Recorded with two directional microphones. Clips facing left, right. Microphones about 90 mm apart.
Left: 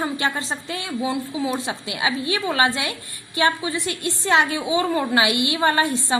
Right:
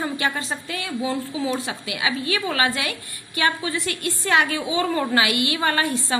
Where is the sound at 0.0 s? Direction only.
25° left (ahead or behind).